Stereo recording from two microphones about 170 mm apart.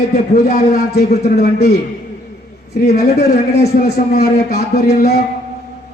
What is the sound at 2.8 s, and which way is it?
A man's voice, 65° left (ahead or behind).